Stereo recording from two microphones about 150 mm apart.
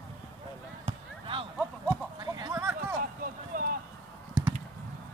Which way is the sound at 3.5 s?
65° right (ahead or behind).